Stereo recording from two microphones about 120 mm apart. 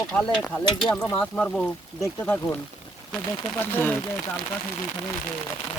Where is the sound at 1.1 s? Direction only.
5° left (ahead or behind).